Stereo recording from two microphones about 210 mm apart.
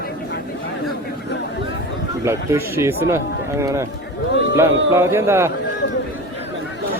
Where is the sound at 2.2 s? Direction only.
15° right (ahead or behind).